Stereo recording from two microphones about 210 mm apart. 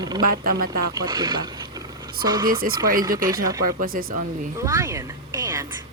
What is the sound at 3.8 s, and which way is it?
Speech, 45° right (ahead or behind).